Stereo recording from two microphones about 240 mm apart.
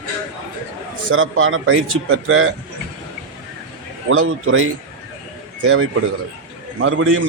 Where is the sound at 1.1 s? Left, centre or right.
Right.